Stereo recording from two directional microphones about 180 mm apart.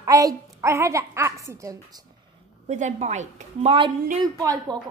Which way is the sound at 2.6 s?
40° right (ahead or behind).